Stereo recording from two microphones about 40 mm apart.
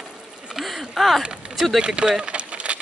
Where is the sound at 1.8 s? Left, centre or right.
Right.